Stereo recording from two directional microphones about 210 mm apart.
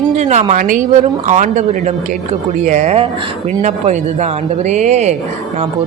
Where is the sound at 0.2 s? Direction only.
35° right (ahead or behind).